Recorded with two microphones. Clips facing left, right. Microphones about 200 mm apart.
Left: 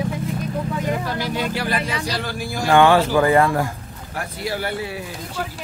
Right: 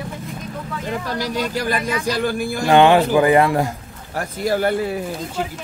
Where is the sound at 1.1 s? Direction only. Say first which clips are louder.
Right 1 dB; 40° right (ahead or behind).